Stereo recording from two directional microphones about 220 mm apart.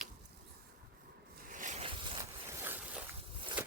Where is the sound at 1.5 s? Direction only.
35° right (ahead or behind).